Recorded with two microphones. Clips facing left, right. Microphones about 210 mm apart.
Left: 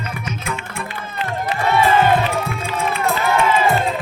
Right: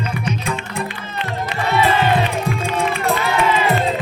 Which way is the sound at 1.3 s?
50° left (ahead or behind).